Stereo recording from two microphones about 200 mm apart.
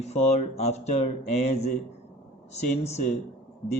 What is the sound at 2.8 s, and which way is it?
Speech, 35° left (ahead or behind).